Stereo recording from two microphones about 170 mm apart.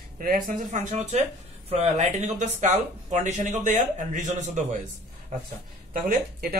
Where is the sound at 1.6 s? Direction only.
40° right (ahead or behind).